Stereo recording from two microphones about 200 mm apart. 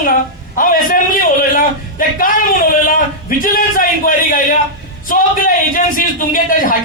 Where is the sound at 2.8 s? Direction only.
45° left (ahead or behind).